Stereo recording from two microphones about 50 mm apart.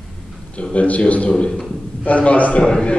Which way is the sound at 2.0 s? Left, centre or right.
Left.